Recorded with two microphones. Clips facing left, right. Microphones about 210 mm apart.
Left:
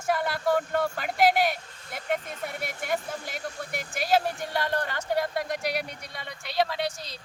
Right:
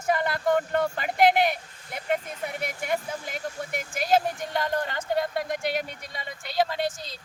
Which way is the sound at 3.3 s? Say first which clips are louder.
Right 2 dB; 50° right (ahead or behind).